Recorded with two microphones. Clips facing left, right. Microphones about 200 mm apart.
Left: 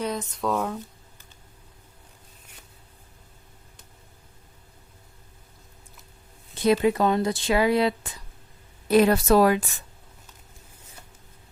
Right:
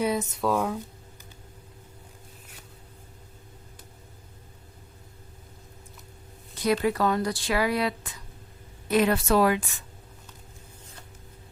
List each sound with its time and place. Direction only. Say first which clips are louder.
0.0 s speech: right 2 dB; 10° right (ahead or behind)
6.5 s speech: left 4 dB; 25° left (ahead or behind)
8.9 s a woman's voice: left 4 dB; 35° left (ahead or behind)